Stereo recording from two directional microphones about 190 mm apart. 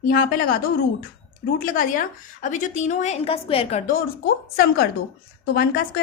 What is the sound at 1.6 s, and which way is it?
A woman's voice, 45° left (ahead or behind).